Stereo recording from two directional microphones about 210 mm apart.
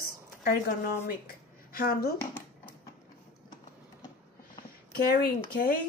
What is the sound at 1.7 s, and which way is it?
Speech, 45° left (ahead or behind).